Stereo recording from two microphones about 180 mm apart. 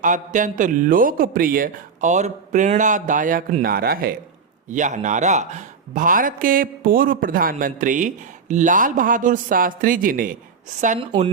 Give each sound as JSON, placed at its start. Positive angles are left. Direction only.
{"t": 0.0, "sound": "a man's voice", "side_deg": -45}
{"t": 4.7, "sound": "a man's voice", "side_deg": -45}